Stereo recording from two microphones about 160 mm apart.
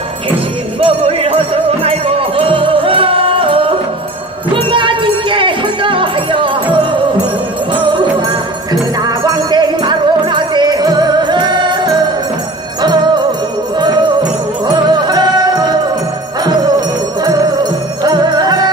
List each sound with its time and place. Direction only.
0.7 s music: 35° right (ahead or behind)
9.0 s music: 25° right (ahead or behind)
17.2 s music: 25° right (ahead or behind)